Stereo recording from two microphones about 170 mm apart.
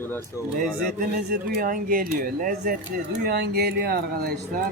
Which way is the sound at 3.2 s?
65° right (ahead or behind).